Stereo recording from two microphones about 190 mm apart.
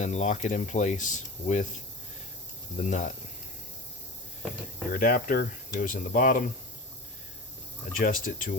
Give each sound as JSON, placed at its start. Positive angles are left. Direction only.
{"t": 0.0, "sound": "speech", "side_deg": 40}
{"t": 4.9, "sound": "speech", "side_deg": 50}
{"t": 7.9, "sound": "speech", "side_deg": 45}